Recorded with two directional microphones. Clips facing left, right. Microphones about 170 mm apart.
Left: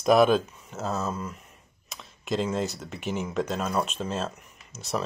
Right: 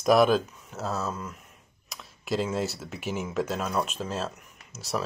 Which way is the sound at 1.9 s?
5° right (ahead or behind).